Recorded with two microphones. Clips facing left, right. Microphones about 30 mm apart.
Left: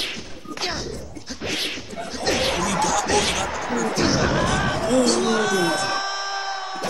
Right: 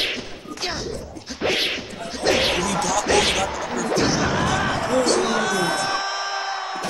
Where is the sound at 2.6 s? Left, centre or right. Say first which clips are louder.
Even; centre.